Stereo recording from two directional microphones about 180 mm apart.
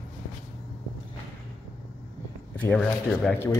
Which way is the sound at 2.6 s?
10° left (ahead or behind).